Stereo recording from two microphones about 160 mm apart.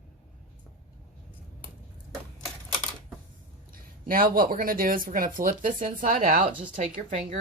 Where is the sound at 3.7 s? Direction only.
65° right (ahead or behind).